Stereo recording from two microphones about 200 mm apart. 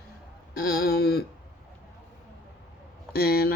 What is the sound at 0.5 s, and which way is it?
Speech, 50° left (ahead or behind).